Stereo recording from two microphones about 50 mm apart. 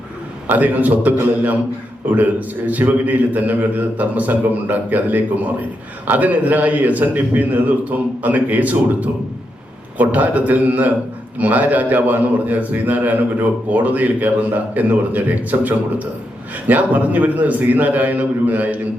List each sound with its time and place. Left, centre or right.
0.4 s a man's voice: right